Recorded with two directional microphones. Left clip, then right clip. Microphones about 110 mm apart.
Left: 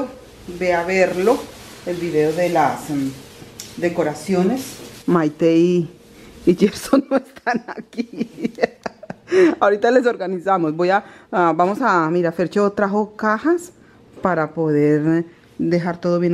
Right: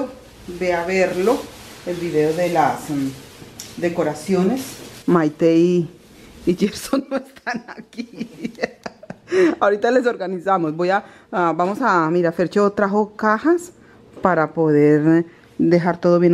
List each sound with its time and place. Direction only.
0.6 s speech: 10° left (ahead or behind)
3.8 s speech: 15° left (ahead or behind)
4.6 s a sound: 20° right (ahead or behind)
5.1 s a woman's voice: centre (ahead or behind)
6.4 s speech: 20° left (ahead or behind); by 13.6 s 5° right (ahead or behind)
14.5 s speech: 15° right (ahead or behind)